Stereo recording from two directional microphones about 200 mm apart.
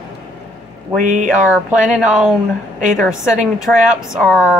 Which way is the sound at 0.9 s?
40° right (ahead or behind).